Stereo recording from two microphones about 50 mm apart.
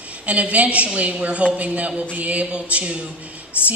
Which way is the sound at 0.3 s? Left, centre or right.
Right.